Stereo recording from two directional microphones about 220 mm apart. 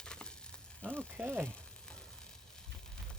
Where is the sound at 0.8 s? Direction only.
5° left (ahead or behind).